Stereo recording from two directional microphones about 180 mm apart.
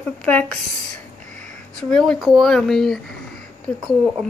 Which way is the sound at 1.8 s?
5° left (ahead or behind).